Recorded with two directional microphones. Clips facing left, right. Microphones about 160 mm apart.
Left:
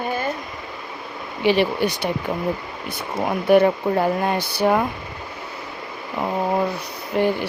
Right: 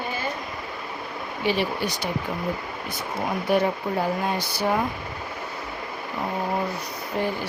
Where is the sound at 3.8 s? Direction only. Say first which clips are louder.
Left 5 dB; 60° left (ahead or behind).